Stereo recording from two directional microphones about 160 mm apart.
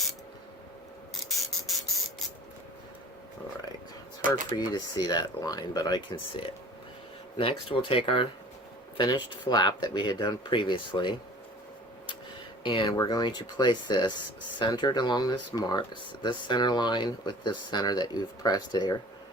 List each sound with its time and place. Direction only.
1.6 s spray: centre (ahead or behind)
4.5 s speech: 25° left (ahead or behind)
12.6 s speech: 30° left (ahead or behind)